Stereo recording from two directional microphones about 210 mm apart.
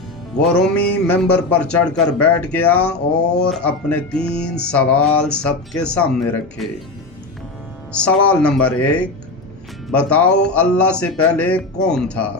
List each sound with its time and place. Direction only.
0.3 s music: 5° left (ahead or behind)
8.3 s music: 5° left (ahead or behind)